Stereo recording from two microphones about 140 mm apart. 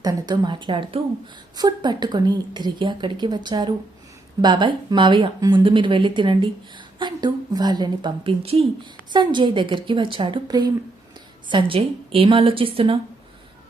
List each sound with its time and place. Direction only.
0.0 s speech: 25° right (ahead or behind); by 13.0 s 40° right (ahead or behind)